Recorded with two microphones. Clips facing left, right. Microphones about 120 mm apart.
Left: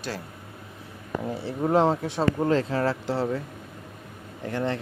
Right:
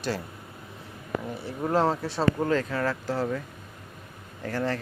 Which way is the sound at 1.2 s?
30° left (ahead or behind).